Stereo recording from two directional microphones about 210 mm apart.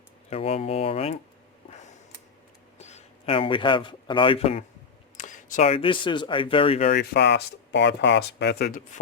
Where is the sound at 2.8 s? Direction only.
30° left (ahead or behind).